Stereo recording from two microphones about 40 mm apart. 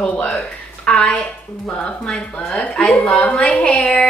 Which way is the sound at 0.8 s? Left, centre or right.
Left.